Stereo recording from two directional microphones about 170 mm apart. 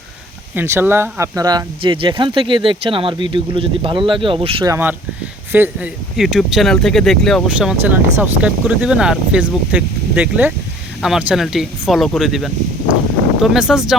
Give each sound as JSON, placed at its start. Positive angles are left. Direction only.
{"t": 0.5, "sound": "speech", "side_deg": -15}
{"t": 4.7, "sound": "speech", "side_deg": -10}